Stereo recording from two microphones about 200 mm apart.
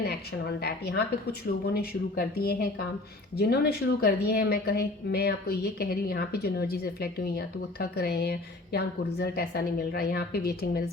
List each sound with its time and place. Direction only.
0.0 s a woman's voice: 55° left (ahead or behind)